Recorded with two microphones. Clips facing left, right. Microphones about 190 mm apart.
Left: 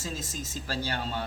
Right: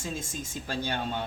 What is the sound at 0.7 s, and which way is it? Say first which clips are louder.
Speech: right 2 dB; 20° right (ahead or behind).